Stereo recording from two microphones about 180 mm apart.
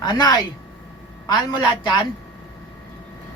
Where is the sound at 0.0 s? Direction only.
25° left (ahead or behind).